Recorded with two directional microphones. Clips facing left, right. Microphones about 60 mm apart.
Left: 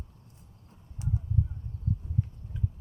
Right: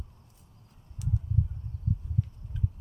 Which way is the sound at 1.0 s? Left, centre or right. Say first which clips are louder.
Even; left.